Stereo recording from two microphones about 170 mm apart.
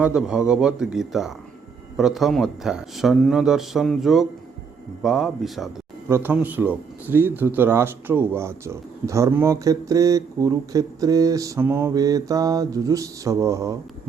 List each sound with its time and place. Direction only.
0.0 s speech: 5° right (ahead or behind)
6.1 s speech: 15° right (ahead or behind)